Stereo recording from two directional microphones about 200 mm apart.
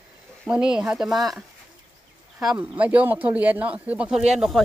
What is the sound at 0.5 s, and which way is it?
Speech, 5° right (ahead or behind).